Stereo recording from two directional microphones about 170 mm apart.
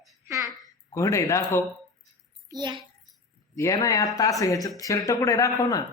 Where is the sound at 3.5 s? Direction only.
20° left (ahead or behind).